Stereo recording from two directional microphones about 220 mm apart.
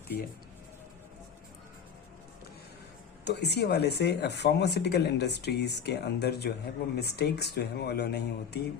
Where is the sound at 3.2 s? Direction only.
50° left (ahead or behind).